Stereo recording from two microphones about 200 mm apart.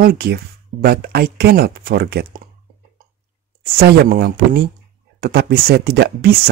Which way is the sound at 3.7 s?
55° right (ahead or behind).